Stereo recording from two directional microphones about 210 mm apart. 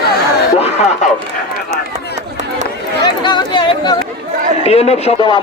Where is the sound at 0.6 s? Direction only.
30° left (ahead or behind).